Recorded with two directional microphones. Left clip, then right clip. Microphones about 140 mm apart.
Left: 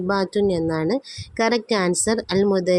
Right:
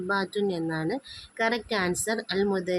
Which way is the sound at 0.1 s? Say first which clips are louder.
Left 7 dB; 40° left (ahead or behind).